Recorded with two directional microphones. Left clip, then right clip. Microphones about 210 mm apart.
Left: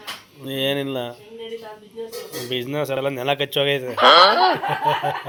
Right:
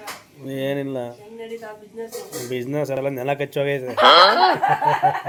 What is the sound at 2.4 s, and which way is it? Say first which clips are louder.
Speech: even; 10° right (ahead or behind).